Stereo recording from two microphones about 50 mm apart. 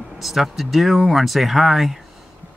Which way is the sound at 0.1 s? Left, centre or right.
Centre.